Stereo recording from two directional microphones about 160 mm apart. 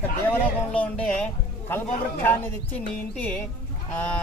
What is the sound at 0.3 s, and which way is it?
Speech, 5° left (ahead or behind).